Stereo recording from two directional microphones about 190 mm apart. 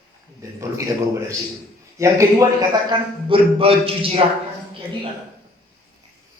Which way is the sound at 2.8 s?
30° right (ahead or behind).